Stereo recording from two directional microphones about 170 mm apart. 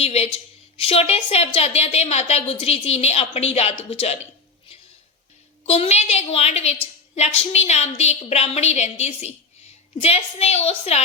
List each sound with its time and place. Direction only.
0.0 s a woman's voice: 35° left (ahead or behind)
5.6 s a woman's voice: 35° left (ahead or behind)